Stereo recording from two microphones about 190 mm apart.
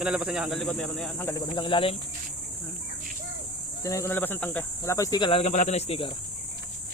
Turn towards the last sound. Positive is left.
turn(degrees=30)  # may be behind; listen again after turning